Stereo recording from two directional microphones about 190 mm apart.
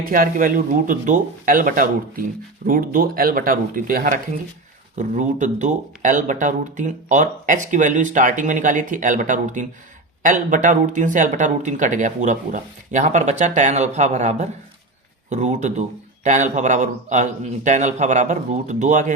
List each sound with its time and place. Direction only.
0.0 s speech: 45° right (ahead or behind)